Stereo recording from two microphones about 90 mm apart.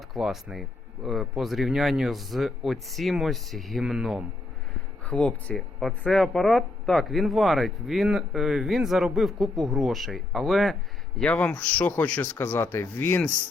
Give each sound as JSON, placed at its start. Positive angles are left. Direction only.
{"t": 0.1, "sound": "speech", "side_deg": 0}
{"t": 5.0, "sound": "speech", "side_deg": 15}
{"t": 11.2, "sound": "speech", "side_deg": 15}